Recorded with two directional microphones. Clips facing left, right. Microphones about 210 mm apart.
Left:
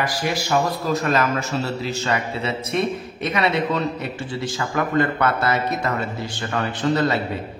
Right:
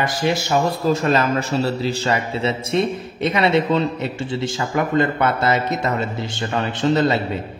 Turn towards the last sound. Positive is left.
turn(degrees=-25)  # may be behind; listen again after turning